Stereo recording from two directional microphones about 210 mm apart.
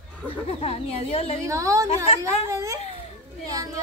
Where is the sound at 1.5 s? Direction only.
15° right (ahead or behind).